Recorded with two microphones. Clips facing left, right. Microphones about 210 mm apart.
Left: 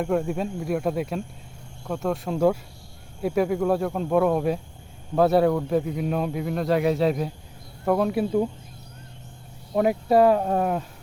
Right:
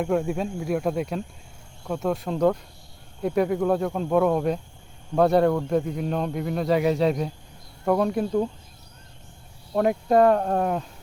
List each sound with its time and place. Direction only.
0.0 s speech: centre (ahead or behind)
9.7 s speech: 5° left (ahead or behind)